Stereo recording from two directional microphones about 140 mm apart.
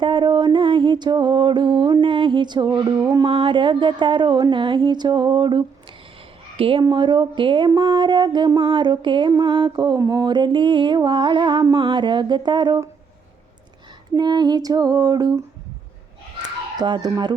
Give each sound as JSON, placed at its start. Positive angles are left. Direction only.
{"t": 0.0, "sound": "mantra", "side_deg": -35}
{"t": 3.0, "sound": "female singing", "side_deg": -20}
{"t": 3.2, "sound": "mantra", "side_deg": -40}
{"t": 14.1, "sound": "female singing", "side_deg": -30}
{"t": 16.4, "sound": "a sound", "side_deg": -30}